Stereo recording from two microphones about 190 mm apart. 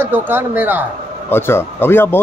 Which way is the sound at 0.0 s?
10° right (ahead or behind).